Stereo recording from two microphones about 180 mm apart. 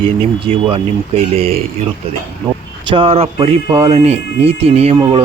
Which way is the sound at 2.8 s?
30° right (ahead or behind).